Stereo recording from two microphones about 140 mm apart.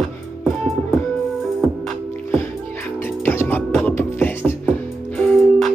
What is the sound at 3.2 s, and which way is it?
Music, 15° left (ahead or behind).